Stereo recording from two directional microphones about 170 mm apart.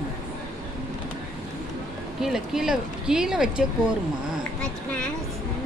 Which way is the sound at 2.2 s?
Centre (ahead or behind).